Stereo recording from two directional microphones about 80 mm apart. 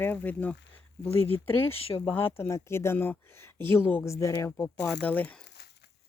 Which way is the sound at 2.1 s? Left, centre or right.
Left.